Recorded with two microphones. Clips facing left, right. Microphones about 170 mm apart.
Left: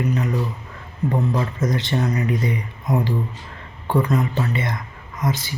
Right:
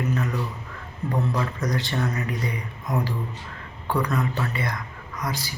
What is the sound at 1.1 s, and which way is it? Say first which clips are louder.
Speech: left 2 dB; 20° left (ahead or behind).